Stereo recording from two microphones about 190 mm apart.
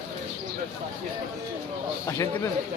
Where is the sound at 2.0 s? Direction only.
15° left (ahead or behind).